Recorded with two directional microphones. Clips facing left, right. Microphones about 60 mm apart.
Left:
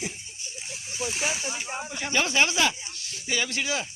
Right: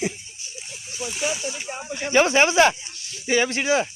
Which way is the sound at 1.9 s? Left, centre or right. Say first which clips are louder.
Right 7 dB; right.